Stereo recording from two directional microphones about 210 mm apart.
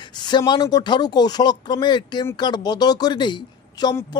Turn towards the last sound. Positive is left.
turn(degrees=20)  # may be behind; listen again after turning